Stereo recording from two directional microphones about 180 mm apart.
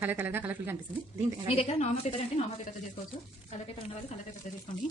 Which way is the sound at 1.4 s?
35° left (ahead or behind).